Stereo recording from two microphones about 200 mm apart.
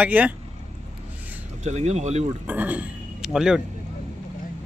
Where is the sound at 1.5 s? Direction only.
35° right (ahead or behind).